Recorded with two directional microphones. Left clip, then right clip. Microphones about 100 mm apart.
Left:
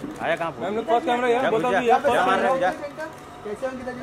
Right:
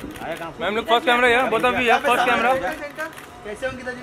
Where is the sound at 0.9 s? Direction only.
40° right (ahead or behind).